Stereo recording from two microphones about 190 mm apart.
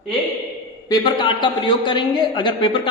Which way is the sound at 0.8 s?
20° left (ahead or behind).